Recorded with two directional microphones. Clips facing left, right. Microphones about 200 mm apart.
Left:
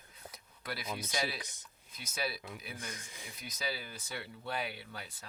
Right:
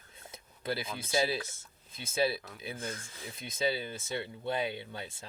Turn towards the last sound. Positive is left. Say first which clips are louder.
# right 6 dB
turn(degrees=-25)  # may be behind; listen again after turning